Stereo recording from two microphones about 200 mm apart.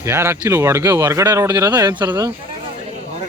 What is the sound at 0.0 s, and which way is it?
A man's voice, 10° right (ahead or behind).